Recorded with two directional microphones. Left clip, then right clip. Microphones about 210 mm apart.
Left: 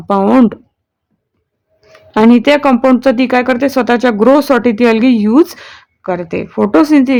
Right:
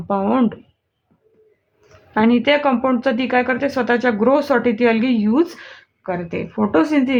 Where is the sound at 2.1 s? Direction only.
50° left (ahead or behind).